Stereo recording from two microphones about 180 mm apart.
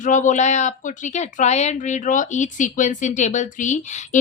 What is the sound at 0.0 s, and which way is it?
A woman's voice, 45° left (ahead or behind).